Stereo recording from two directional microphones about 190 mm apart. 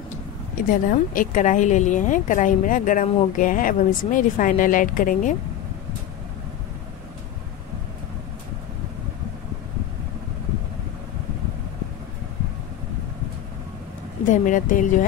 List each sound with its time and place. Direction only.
0.8 s a woman's voice: 45° left (ahead or behind)
14.3 s a woman's voice: 45° left (ahead or behind)